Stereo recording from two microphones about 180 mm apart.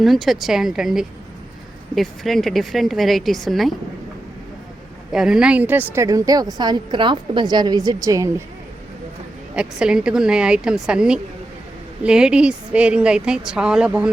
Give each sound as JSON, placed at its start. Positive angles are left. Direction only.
{"t": 0.0, "sound": "speech", "side_deg": 0}
{"t": 5.1, "sound": "a woman's voice", "side_deg": -5}
{"t": 9.6, "sound": "speech", "side_deg": -5}